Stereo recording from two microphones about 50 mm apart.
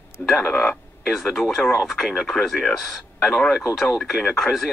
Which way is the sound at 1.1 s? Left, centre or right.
Centre.